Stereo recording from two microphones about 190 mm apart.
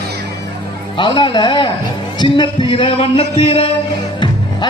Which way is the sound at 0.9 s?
25° left (ahead or behind).